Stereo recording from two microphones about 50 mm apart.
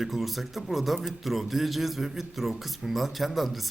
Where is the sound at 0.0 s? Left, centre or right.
Centre.